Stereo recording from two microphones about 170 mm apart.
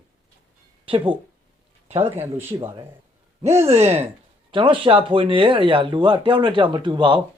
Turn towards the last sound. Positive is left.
turn(degrees=-25)  # may be behind; listen again after turning